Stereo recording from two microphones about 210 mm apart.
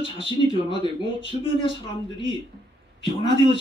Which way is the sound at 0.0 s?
25° left (ahead or behind).